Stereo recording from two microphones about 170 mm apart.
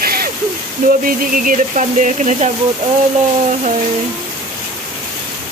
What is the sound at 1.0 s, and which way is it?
Speech, 55° right (ahead or behind).